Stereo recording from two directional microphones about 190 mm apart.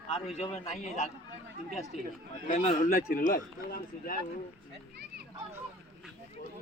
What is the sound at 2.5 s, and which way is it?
A man's voice, 40° left (ahead or behind).